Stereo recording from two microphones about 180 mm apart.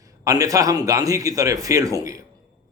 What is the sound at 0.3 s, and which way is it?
Speech, 20° right (ahead or behind).